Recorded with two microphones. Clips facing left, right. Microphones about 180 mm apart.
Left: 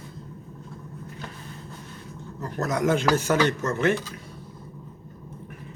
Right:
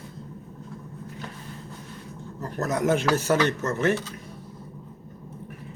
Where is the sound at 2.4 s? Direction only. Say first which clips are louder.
Even; 40° right (ahead or behind).